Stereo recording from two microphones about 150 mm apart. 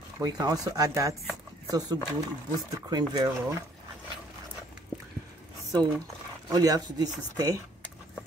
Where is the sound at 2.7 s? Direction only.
25° right (ahead or behind).